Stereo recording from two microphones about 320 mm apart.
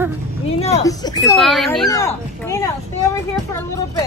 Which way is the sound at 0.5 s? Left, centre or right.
Centre.